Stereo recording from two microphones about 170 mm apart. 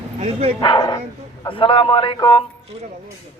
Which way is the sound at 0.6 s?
25° left (ahead or behind).